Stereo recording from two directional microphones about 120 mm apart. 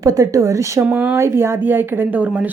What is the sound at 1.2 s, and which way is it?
A woman's voice, 20° right (ahead or behind).